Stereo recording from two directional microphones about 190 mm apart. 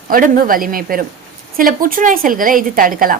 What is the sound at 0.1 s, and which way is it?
A woman's voice, 50° right (ahead or behind).